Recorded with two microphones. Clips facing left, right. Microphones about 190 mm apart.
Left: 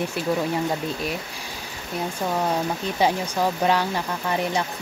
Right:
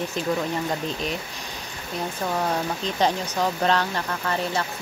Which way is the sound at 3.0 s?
10° left (ahead or behind).